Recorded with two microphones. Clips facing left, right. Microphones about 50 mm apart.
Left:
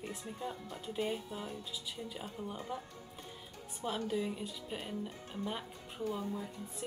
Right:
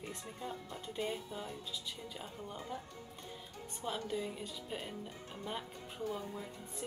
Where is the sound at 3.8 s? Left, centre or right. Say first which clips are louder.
Left 3 dB; centre.